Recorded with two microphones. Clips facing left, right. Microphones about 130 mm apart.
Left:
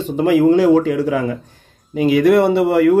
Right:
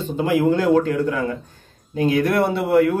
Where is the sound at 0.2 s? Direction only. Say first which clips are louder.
Left 6 dB; 70° left (ahead or behind).